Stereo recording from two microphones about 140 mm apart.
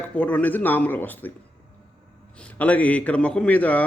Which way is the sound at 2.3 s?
10° left (ahead or behind).